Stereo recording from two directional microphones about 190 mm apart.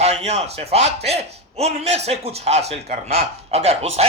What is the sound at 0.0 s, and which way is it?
A man's voice, 35° right (ahead or behind).